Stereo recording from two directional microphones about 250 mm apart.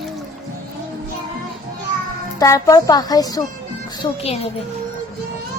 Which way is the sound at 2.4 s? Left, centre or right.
Centre.